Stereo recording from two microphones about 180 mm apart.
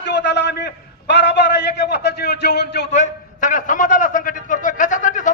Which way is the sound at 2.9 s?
40° left (ahead or behind).